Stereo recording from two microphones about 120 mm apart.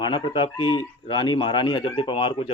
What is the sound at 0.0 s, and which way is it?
Speech, 40° left (ahead or behind).